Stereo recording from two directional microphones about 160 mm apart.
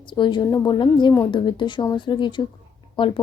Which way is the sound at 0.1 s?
30° left (ahead or behind).